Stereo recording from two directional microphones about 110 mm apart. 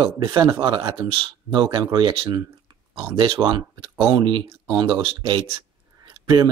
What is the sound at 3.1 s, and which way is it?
Speech, 45° right (ahead or behind).